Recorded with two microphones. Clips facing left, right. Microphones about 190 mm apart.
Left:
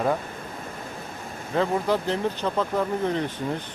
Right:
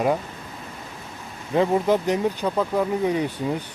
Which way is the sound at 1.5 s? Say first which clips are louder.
Right 4 dB; 15° right (ahead or behind).